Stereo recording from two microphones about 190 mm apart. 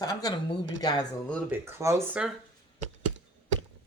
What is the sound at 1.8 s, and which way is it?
Speech, 15° right (ahead or behind).